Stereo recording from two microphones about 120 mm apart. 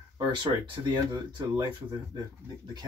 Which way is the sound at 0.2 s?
40° right (ahead or behind).